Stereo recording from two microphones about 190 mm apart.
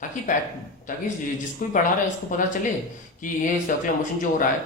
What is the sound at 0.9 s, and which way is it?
A man's voice, 40° left (ahead or behind).